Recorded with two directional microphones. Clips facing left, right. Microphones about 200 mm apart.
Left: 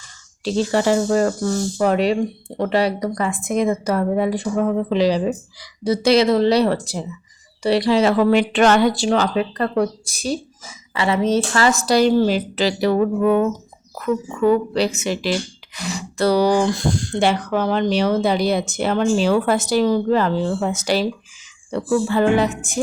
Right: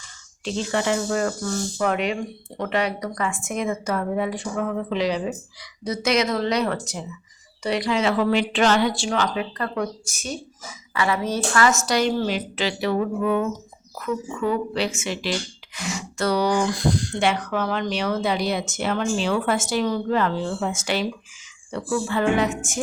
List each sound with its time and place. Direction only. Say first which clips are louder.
0.4 s speech: left 6 dB; 35° left (ahead or behind)